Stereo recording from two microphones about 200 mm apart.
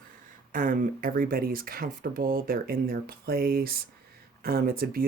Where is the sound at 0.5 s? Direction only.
45° right (ahead or behind).